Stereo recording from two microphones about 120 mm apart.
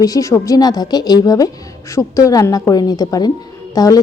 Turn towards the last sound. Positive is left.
turn(degrees=30)  # may be behind; listen again after turning